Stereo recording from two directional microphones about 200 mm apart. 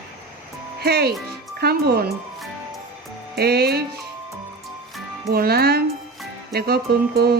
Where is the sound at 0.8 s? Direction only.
50° right (ahead or behind).